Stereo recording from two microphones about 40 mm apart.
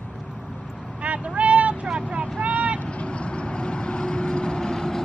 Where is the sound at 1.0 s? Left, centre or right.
Right.